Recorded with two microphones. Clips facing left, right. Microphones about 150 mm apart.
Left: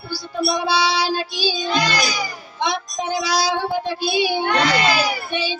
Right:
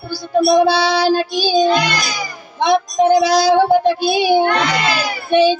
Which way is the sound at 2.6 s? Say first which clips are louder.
Right 12 dB; 50° right (ahead or behind).